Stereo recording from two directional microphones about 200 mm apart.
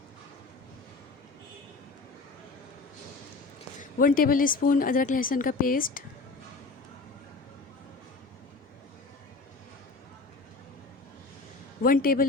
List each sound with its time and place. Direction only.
3.8 s a woman's voice: 45° left (ahead or behind)
11.8 s speech: 45° left (ahead or behind)